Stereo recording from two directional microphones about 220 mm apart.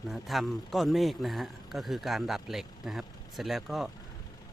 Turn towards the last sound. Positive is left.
turn(degrees=0)  # may be behind; listen again after turning